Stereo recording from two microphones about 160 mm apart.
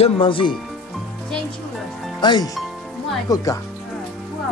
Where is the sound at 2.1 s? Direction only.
25° left (ahead or behind).